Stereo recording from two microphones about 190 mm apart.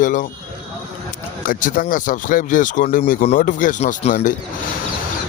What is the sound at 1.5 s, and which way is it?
A man's voice, 45° left (ahead or behind).